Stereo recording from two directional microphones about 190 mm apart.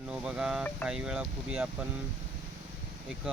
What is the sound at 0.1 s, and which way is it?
Speech, 5° right (ahead or behind).